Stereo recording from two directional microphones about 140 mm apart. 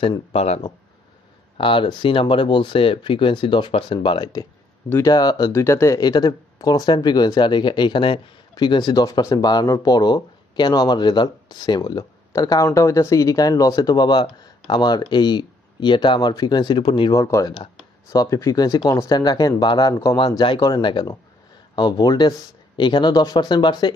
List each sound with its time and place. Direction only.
0.3 s speech: 45° left (ahead or behind); by 4.5 s 30° left (ahead or behind)
4.8 s speech: 15° left (ahead or behind)
5.1 s speech: 30° left (ahead or behind)
17.2 s speech: 25° left (ahead or behind)